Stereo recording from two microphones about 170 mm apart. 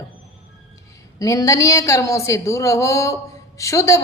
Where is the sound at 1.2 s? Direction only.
20° left (ahead or behind).